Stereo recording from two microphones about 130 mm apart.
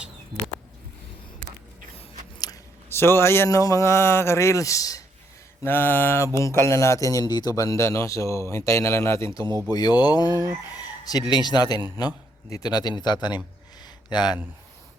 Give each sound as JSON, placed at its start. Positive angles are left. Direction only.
{"t": 2.9, "sound": "a man's voice", "side_deg": 20}
{"t": 5.6, "sound": "mantra", "side_deg": 15}
{"t": 6.3, "sound": "a man's voice", "side_deg": 20}
{"t": 9.5, "sound": "speech", "side_deg": -30}
{"t": 9.7, "sound": "a man's voice", "side_deg": 30}